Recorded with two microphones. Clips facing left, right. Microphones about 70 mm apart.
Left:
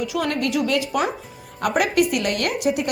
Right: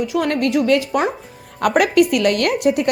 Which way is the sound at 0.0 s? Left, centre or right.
Right.